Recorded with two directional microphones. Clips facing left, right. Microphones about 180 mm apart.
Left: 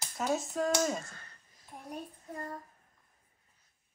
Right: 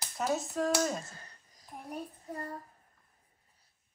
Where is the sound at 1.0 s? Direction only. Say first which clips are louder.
Right 1 dB; 35° right (ahead or behind).